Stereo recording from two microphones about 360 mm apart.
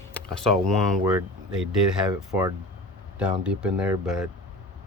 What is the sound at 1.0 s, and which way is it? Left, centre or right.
Speech, centre.